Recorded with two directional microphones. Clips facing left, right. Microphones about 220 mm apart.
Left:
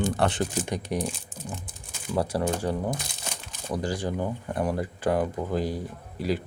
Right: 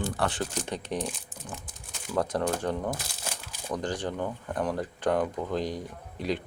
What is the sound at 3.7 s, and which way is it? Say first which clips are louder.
Speech: left 2 dB; 10° left (ahead or behind).